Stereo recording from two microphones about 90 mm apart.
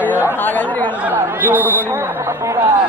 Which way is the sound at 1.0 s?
20° right (ahead or behind).